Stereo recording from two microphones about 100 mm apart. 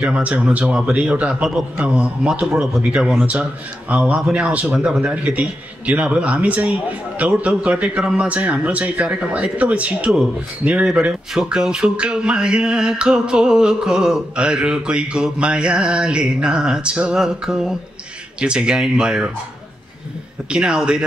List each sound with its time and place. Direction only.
0.0 s speech: 10° right (ahead or behind)
20.4 s speech: 5° right (ahead or behind)